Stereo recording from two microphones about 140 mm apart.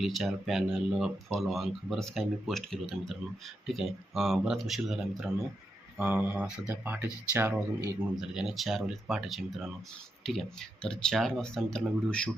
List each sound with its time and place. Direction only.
0.0 s speech: centre (ahead or behind)
6.0 s speech: 15° right (ahead or behind)
8.1 s speech: 5° right (ahead or behind)